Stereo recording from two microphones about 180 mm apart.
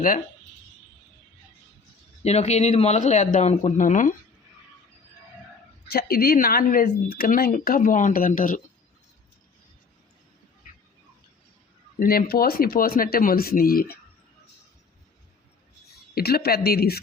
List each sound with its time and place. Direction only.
2.2 s speech: 35° left (ahead or behind)
5.9 s speech: 55° left (ahead or behind)
11.9 s speech: 55° left (ahead or behind)
15.9 s speech: 60° left (ahead or behind)